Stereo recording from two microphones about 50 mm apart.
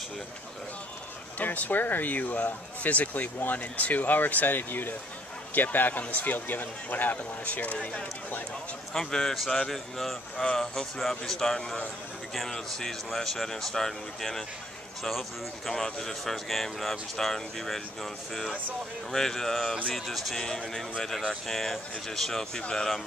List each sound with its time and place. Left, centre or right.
1.4 s speech: left
8.9 s speech: centre
10.3 s speech: left
10.6 s speech: centre
19.1 s speech: centre
20.4 s speech: centre